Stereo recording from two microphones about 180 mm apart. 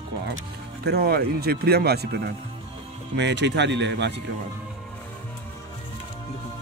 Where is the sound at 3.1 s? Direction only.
75° right (ahead or behind).